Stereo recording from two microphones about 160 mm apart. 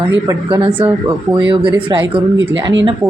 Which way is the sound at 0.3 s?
30° right (ahead or behind).